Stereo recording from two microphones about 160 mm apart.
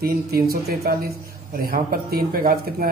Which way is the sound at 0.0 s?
75° right (ahead or behind).